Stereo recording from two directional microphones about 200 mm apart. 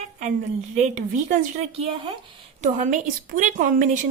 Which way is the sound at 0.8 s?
35° right (ahead or behind).